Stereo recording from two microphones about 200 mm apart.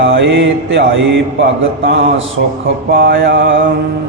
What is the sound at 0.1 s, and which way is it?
Mantra, 65° right (ahead or behind).